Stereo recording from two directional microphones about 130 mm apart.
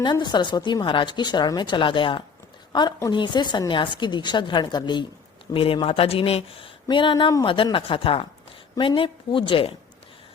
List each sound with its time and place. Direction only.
0.0 s a woman's voice: 35° left (ahead or behind)